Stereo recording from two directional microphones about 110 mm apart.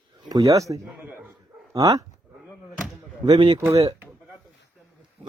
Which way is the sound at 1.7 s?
30° right (ahead or behind).